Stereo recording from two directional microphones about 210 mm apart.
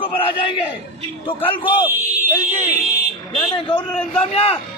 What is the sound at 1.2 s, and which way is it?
Speech, 25° left (ahead or behind).